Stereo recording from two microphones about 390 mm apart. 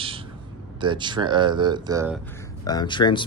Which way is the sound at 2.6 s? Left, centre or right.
Centre.